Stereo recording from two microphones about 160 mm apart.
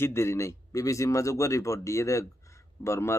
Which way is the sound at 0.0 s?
15° left (ahead or behind).